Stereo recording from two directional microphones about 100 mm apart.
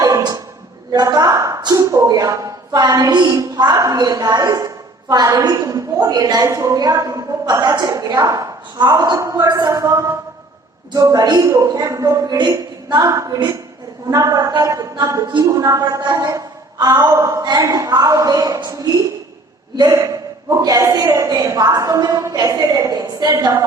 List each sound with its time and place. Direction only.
0.0 s a sound: 35° right (ahead or behind)
0.9 s a woman's voice: 40° right (ahead or behind)
19.9 s a woman's voice: 35° right (ahead or behind)